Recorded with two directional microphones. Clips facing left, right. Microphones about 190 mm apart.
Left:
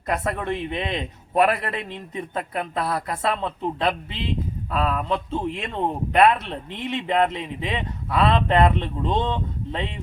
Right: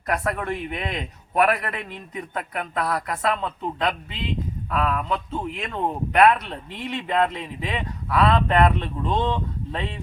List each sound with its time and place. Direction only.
0.1 s a man's voice: 25° left (ahead or behind)